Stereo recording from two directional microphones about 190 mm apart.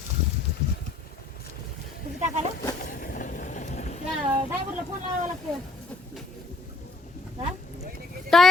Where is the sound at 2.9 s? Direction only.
45° left (ahead or behind).